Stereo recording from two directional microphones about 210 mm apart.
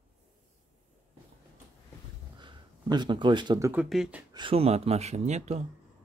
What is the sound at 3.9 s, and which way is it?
Speech, 5° right (ahead or behind).